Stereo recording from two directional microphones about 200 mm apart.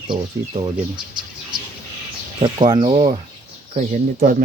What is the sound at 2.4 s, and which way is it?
Speech, 25° right (ahead or behind).